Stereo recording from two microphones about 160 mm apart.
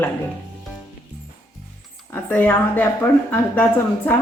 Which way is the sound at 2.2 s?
15° left (ahead or behind).